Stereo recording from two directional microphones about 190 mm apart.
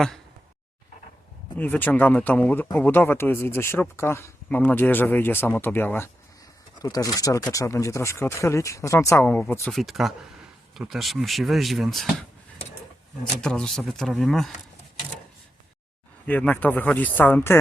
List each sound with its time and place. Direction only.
1.5 s speech: 10° left (ahead or behind)
13.4 s speech: 5° left (ahead or behind)
16.2 s speech: 10° left (ahead or behind)